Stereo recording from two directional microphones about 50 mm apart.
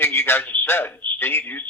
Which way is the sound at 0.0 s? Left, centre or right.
Left.